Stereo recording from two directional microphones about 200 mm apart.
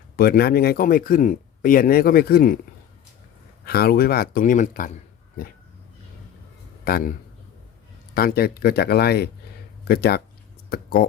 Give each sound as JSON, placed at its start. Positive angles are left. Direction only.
{"t": 0.2, "sound": "speech", "side_deg": 50}
{"t": 3.7, "sound": "speech", "side_deg": 50}
{"t": 6.8, "sound": "a man's voice", "side_deg": 45}
{"t": 8.1, "sound": "speech", "side_deg": 50}